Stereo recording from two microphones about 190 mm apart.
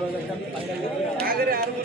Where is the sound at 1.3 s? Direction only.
50° right (ahead or behind).